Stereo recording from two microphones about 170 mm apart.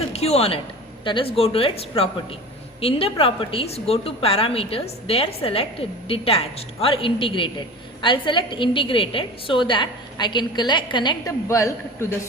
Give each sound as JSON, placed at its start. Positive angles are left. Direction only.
{"t": 0.1, "sound": "a woman's voice", "side_deg": 40}